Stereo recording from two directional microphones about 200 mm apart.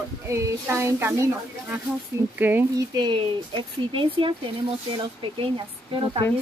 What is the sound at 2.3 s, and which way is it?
Speech, 10° right (ahead or behind).